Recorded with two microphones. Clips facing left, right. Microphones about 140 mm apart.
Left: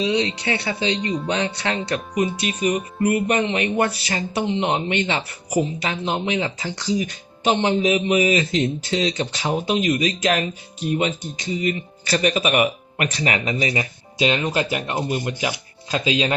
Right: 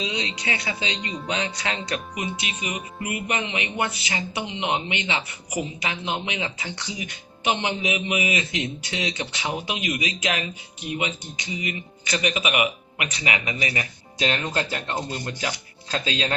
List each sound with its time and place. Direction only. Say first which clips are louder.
0.0 s speech: left 8 dB; 30° left (ahead or behind)
5.5 s speech: left 7 dB; 30° left (ahead or behind)
6.9 s speech: left 14 dB; 15° right (ahead or behind)
7.4 s speech: left 7 dB; 35° left (ahead or behind)
8.5 s speech: left 8 dB; 50° left (ahead or behind)
13.4 s speech: left 5 dB; 30° left (ahead or behind); by 16.3 s 15° left (ahead or behind)